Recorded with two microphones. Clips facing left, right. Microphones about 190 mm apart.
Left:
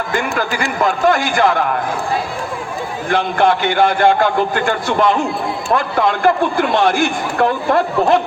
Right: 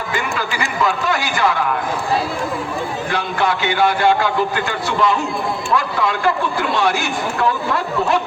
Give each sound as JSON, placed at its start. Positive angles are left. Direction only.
{"t": 0.1, "sound": "a man's voice", "side_deg": 50}
{"t": 3.1, "sound": "a man's voice", "side_deg": 50}